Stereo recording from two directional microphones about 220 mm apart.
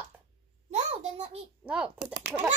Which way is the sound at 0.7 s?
30° right (ahead or behind).